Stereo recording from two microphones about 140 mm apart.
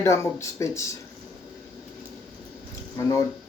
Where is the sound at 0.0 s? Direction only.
20° left (ahead or behind).